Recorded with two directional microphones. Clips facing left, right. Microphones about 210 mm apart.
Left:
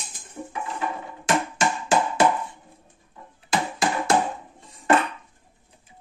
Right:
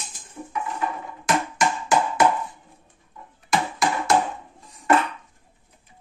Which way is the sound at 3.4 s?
30° left (ahead or behind).